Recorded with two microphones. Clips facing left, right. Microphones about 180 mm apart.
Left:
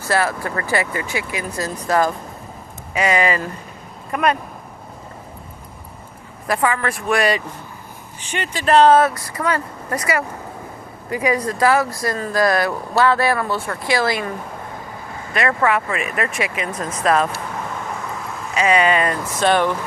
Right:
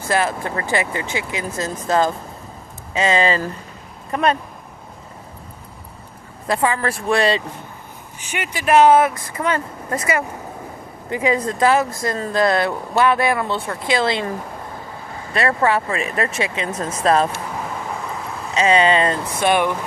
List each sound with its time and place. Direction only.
0.1 s speech: 20° right (ahead or behind)
6.5 s speech: 25° right (ahead or behind)
8.2 s speech: 10° right (ahead or behind); by 17.2 s 30° right (ahead or behind)
18.5 s speech: 30° right (ahead or behind)
19.4 s speech: 10° right (ahead or behind)